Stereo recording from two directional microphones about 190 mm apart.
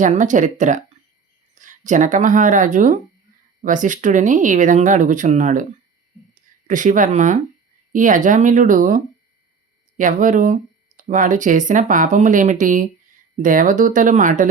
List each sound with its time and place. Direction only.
0.0 s speech: 40° right (ahead or behind)
6.7 s speech: 45° right (ahead or behind)
10.0 s speech: 45° right (ahead or behind)